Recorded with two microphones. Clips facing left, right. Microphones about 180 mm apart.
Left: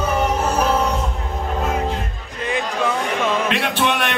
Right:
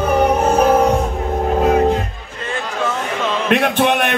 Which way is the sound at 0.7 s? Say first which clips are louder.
Right 6 dB; 45° right (ahead or behind).